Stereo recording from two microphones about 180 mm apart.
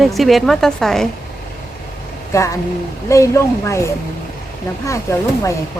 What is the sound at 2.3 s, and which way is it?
Speech, 15° left (ahead or behind).